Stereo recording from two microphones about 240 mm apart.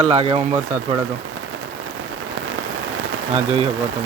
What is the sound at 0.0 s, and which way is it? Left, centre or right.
Speech, right.